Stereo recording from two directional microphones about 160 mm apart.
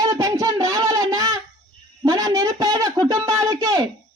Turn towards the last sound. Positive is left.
turn(degrees=-20)  # may be behind; listen again after turning